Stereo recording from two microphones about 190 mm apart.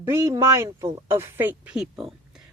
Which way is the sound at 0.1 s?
15° right (ahead or behind).